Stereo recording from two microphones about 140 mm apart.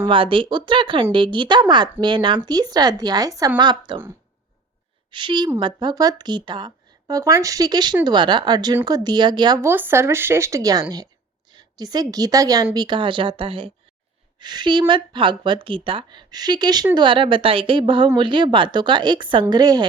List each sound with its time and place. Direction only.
0.0 s speech: 40° right (ahead or behind)
5.1 s speech: 35° right (ahead or behind)
9.6 s a woman's voice: 15° right (ahead or behind)